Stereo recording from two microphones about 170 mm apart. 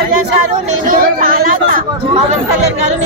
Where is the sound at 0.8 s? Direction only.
55° right (ahead or behind).